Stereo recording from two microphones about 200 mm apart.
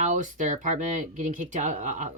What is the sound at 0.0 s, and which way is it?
Speech, 40° right (ahead or behind).